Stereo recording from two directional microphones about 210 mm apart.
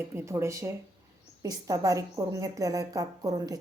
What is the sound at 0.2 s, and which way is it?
A woman's voice, 10° right (ahead or behind).